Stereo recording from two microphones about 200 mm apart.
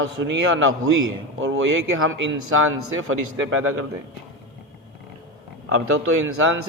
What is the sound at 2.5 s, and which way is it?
Speech, 90° right.